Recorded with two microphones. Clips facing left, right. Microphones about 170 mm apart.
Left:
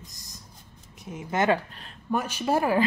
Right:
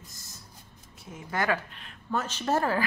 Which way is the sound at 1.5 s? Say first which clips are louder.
Left 4 dB; 40° left (ahead or behind).